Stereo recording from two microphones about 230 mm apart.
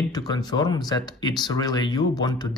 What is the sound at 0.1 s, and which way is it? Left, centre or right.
Speech, centre.